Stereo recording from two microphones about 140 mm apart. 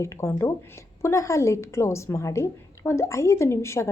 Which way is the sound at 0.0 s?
20° left (ahead or behind).